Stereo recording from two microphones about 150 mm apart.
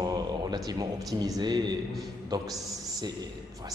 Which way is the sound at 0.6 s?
25° right (ahead or behind).